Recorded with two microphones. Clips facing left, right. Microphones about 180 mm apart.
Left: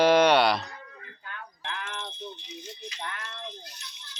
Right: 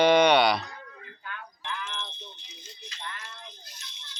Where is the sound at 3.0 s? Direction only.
65° left (ahead or behind).